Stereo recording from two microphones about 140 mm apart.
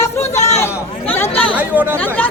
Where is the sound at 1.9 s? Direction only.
10° left (ahead or behind).